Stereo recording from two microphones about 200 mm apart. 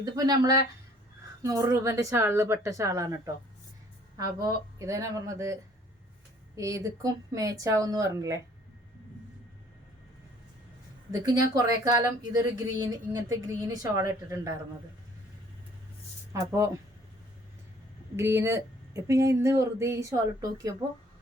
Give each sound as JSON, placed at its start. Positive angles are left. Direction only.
{"t": 0.0, "sound": "speech", "side_deg": -20}
{"t": 6.6, "sound": "speech", "side_deg": -15}
{"t": 11.3, "sound": "speech", "side_deg": -15}
{"t": 16.3, "sound": "speech", "side_deg": -15}
{"t": 18.2, "sound": "speech", "side_deg": -15}